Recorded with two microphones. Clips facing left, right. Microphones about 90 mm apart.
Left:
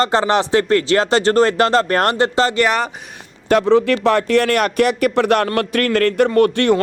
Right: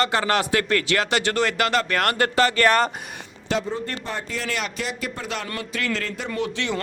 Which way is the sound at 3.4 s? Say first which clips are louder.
Left 13 dB; 70° left (ahead or behind).